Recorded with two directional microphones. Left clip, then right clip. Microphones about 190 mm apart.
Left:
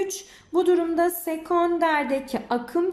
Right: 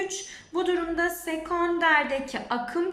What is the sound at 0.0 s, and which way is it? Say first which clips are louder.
Female singing: left 3 dB; 25° left (ahead or behind).